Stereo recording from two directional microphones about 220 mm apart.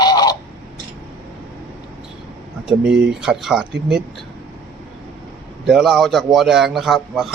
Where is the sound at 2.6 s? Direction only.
Centre (ahead or behind).